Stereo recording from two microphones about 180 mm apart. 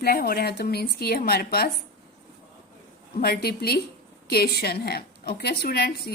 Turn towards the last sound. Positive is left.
turn(degrees=60)  # may be behind; listen again after turning